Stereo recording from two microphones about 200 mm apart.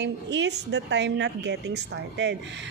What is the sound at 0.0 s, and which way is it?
A woman's voice, 60° right (ahead or behind).